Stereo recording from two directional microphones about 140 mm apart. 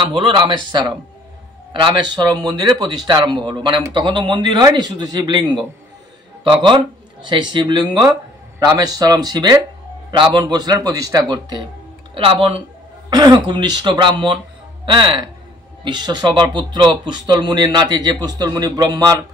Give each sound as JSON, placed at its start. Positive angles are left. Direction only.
{"t": 0.0, "sound": "speech", "side_deg": -35}
{"t": 7.2, "sound": "speech", "side_deg": -35}